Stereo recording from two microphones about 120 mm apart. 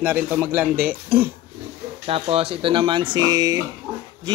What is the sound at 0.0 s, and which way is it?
Speech, 15° right (ahead or behind).